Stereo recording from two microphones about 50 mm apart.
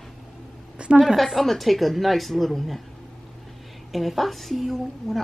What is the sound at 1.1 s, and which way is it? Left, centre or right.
A woman's voice, centre.